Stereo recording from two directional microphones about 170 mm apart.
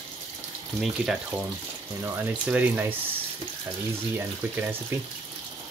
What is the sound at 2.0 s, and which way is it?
Speech, 15° right (ahead or behind).